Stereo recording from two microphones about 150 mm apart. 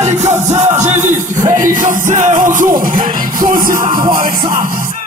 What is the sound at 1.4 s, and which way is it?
Music, 20° right (ahead or behind).